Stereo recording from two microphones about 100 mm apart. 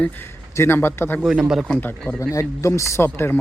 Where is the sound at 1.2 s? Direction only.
5° right (ahead or behind).